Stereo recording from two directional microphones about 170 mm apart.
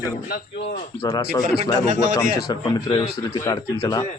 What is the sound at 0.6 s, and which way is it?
Speech, 35° left (ahead or behind).